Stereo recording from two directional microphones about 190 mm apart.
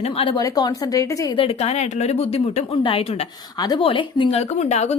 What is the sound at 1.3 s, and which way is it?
Speech, 35° left (ahead or behind).